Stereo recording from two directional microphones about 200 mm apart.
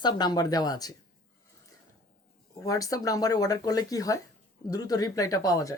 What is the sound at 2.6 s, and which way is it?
Speech, 15° left (ahead or behind).